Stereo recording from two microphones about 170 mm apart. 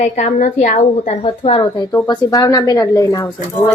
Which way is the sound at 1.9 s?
20° left (ahead or behind).